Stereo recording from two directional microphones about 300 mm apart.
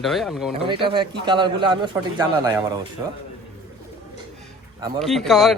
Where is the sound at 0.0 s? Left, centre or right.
Centre.